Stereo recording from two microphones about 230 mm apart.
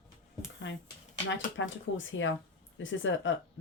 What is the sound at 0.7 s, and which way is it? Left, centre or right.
Speech, left.